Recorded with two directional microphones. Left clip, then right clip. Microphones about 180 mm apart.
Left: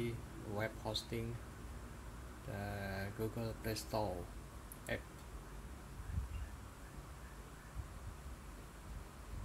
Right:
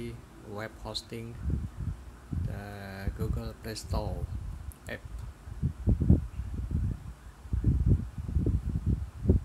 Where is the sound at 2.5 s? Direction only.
25° right (ahead or behind).